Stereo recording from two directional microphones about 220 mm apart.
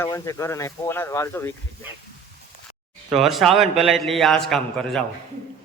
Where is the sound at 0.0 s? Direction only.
15° left (ahead or behind).